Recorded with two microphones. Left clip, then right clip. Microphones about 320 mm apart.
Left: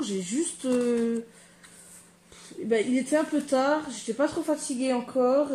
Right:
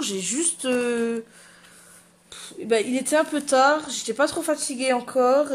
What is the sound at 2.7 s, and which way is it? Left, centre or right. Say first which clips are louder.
Speech: right 3 dB; right.